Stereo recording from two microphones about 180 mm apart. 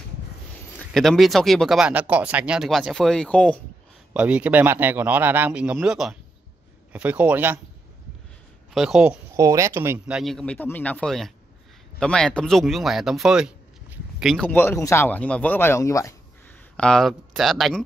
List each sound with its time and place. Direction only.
0.7 s speech: centre (ahead or behind)
4.1 s speech: 5° right (ahead or behind)
8.7 s speech: centre (ahead or behind)
9.4 s speech: 15° right (ahead or behind); by 16.2 s 20° left (ahead or behind)
16.7 s speech: 5° left (ahead or behind)